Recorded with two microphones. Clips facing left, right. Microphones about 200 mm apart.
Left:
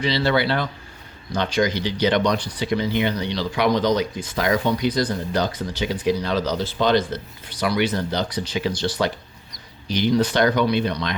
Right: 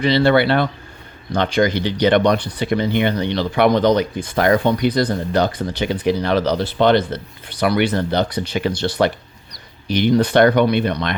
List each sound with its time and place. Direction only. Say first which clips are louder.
0.0 s speech: right 6 dB; 55° right (ahead or behind)